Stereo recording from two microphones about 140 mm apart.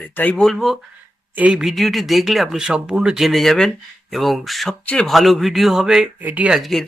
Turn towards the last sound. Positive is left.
turn(degrees=0)  # may be behind; listen again after turning